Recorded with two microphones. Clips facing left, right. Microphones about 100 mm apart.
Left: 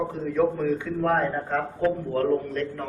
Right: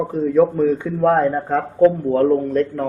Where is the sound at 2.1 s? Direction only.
35° right (ahead or behind).